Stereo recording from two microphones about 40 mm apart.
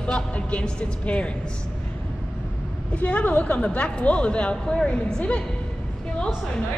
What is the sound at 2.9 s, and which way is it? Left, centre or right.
A woman's voice, left.